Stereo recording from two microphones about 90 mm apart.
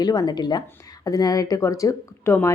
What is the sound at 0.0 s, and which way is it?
A woman's voice, 45° left (ahead or behind).